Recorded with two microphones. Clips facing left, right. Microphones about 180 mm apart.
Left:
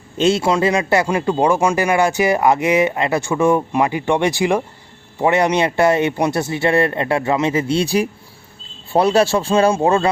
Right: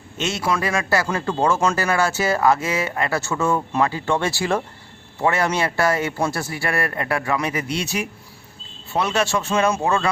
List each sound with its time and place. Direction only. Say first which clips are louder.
0.2 s a man's voice: left 8 dB; 30° left (ahead or behind)